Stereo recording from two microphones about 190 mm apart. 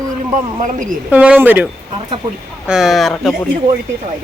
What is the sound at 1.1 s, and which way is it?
Speech, 10° right (ahead or behind).